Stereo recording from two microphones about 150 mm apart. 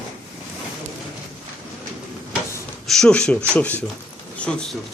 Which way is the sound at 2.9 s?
5° left (ahead or behind).